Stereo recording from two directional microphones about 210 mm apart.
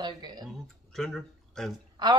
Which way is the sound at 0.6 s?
Centre (ahead or behind).